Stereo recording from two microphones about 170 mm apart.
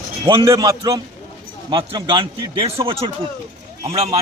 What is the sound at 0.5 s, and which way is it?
A man's voice, 25° right (ahead or behind).